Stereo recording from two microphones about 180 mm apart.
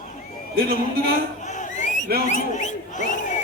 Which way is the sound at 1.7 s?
45° left (ahead or behind).